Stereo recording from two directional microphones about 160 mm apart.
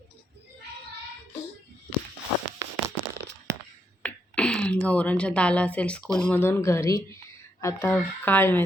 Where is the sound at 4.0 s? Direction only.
10° left (ahead or behind).